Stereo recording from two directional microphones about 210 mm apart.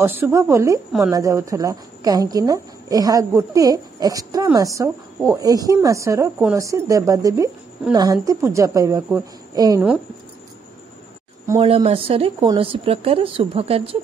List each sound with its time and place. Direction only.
0.0 s speech: 10° right (ahead or behind)
11.6 s speech: 25° right (ahead or behind)